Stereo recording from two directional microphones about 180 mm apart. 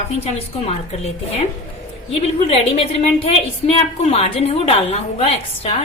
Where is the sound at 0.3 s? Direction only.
35° left (ahead or behind).